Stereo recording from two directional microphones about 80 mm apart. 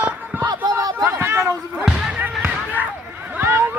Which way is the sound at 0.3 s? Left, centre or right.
Right.